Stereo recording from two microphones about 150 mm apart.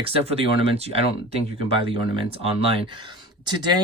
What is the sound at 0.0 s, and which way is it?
Speech, 40° right (ahead or behind).